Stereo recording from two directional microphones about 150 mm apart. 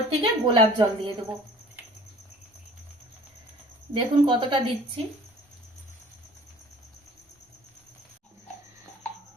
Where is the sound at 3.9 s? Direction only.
35° right (ahead or behind).